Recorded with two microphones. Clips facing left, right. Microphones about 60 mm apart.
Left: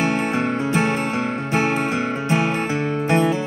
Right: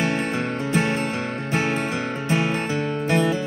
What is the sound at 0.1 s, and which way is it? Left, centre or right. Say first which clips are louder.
Music: left 3 dB; centre.